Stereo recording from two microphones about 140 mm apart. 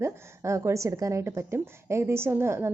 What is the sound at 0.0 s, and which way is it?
A woman's voice, 20° right (ahead or behind).